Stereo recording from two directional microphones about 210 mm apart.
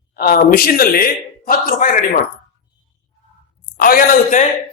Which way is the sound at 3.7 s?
45° left (ahead or behind).